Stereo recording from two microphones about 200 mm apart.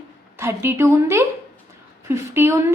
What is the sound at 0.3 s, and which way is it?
A woman's voice, 10° right (ahead or behind).